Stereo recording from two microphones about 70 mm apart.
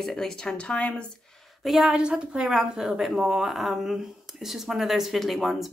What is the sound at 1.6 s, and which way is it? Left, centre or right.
A woman's voice, centre.